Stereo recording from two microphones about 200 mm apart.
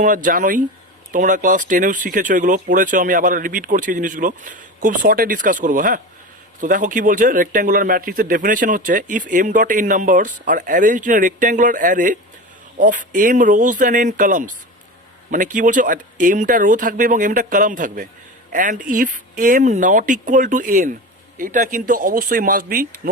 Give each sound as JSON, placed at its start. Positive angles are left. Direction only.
{"t": 0.0, "sound": "speech", "side_deg": -40}